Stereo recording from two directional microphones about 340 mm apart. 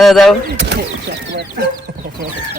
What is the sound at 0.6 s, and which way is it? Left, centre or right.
Speech, right.